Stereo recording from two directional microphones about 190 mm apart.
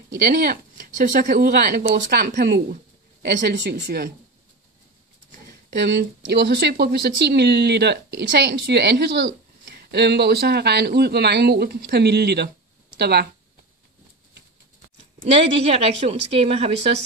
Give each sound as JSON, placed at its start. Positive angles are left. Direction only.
{"t": 0.2, "sound": "speech", "side_deg": -55}
{"t": 5.8, "sound": "speech", "side_deg": -65}
{"t": 15.3, "sound": "a woman's voice", "side_deg": -30}